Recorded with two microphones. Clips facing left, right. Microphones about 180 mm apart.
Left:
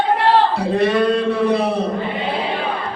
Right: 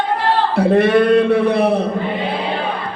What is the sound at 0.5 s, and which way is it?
A man's voice, 60° right (ahead or behind).